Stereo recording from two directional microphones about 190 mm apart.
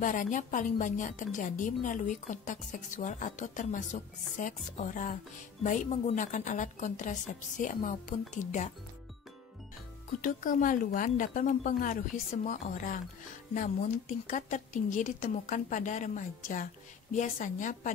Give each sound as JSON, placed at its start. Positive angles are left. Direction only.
{"t": 0.0, "sound": "a woman's voice", "side_deg": 45}
{"t": 10.2, "sound": "a woman's voice", "side_deg": 45}